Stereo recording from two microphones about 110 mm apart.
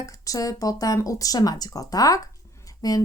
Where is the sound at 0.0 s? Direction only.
30° left (ahead or behind).